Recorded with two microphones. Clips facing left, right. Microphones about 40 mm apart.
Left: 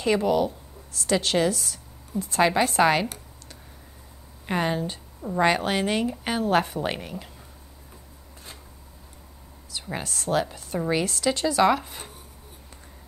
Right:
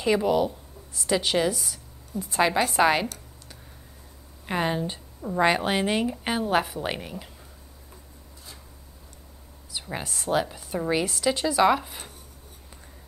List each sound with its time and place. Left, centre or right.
0.0 s a woman's voice: centre
2.4 s a woman's voice: centre
4.5 s a woman's voice: centre
5.5 s a woman's voice: centre
10.0 s a woman's voice: centre